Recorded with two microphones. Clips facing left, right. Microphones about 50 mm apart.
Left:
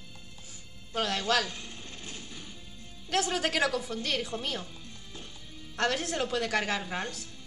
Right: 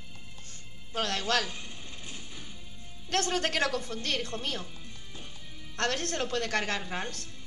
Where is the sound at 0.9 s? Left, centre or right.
Centre.